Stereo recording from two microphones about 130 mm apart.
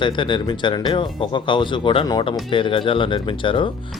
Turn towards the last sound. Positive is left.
turn(degrees=40)  # may be behind; listen again after turning